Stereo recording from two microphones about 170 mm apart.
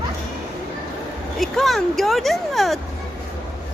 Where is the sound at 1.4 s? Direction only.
Centre (ahead or behind).